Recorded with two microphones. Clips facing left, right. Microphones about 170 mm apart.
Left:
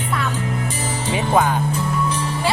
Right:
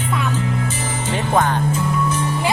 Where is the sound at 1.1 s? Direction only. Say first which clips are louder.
Left 1 dB; 5° left (ahead or behind).